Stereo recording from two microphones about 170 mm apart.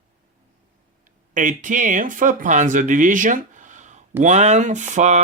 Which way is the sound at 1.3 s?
50° right (ahead or behind).